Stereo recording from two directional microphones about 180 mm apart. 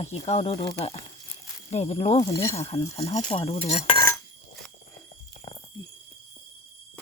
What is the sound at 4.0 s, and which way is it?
Dishes, 20° left (ahead or behind).